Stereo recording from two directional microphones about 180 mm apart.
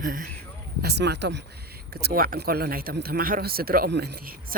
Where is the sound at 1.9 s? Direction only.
60° right (ahead or behind).